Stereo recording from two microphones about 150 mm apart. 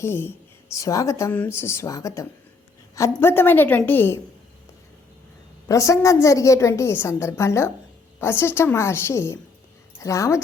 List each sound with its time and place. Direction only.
0.0 s a woman's voice: 15° left (ahead or behind)
5.6 s a woman's voice: 20° left (ahead or behind)